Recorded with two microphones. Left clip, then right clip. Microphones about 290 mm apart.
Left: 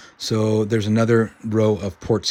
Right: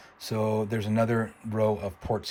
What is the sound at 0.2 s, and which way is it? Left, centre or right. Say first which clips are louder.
Speech: left 7 dB; left.